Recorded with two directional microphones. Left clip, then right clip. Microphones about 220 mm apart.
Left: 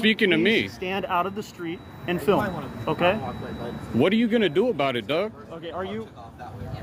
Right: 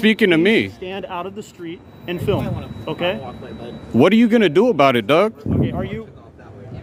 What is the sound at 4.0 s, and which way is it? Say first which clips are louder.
A man's voice: right 8 dB; 45° right (ahead or behind).